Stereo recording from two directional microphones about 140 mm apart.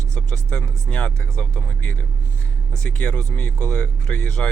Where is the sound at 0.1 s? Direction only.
10° left (ahead or behind).